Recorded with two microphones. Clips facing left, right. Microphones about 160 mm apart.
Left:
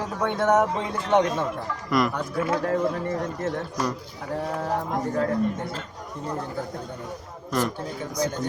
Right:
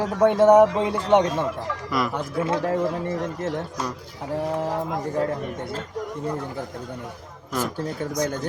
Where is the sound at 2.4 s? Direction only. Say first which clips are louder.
Right 1 dB; 25° right (ahead or behind).